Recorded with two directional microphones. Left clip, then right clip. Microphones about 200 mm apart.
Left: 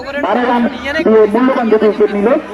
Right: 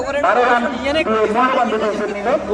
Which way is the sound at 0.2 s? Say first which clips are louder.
Left 1 dB; 35° left (ahead or behind).